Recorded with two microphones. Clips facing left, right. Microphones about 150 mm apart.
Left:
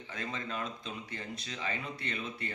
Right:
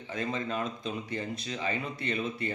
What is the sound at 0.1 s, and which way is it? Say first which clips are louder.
A man's voice: right 7 dB; 20° right (ahead or behind).